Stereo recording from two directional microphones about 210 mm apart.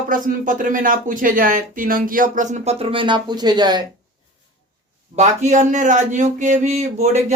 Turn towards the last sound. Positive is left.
turn(degrees=-35)  # may be behind; listen again after turning